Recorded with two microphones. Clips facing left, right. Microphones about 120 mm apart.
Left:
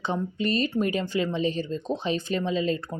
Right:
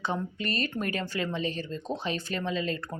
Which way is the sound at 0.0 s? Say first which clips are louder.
Left 4 dB; 25° left (ahead or behind).